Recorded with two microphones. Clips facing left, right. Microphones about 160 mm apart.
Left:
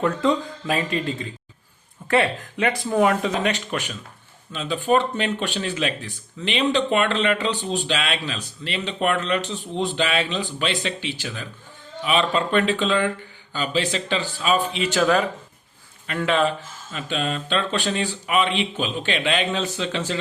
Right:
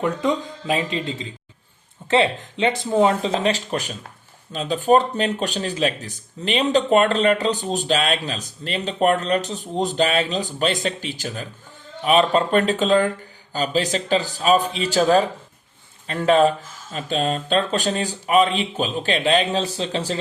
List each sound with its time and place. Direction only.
0.0 s speech: 15° right (ahead or behind); by 20.1 s 35° right (ahead or behind)